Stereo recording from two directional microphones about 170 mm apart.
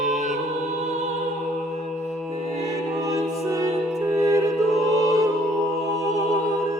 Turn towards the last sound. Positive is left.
turn(degrees=-20)  # may be behind; listen again after turning